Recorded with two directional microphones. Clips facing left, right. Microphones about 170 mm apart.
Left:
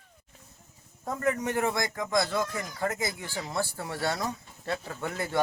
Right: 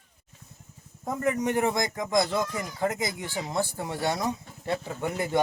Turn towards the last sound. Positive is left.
turn(degrees=-15)  # may be behind; listen again after turning